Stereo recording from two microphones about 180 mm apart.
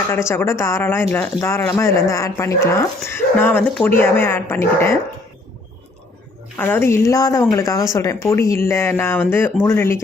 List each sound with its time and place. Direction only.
0.1 s speech: 15° left (ahead or behind)
6.6 s speech: 10° left (ahead or behind)